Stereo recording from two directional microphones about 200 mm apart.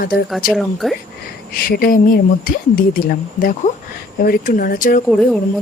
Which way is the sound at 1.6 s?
45° left (ahead or behind).